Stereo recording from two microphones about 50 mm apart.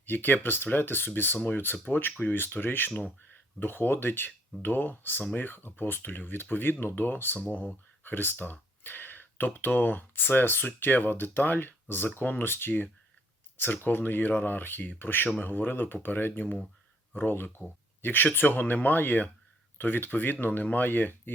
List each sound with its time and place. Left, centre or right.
0.0 s speech: left
8.0 s speech: left